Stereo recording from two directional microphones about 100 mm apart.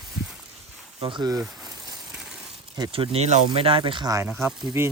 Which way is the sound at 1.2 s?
40° right (ahead or behind).